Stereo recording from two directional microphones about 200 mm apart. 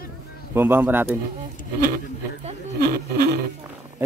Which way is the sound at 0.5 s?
10° right (ahead or behind).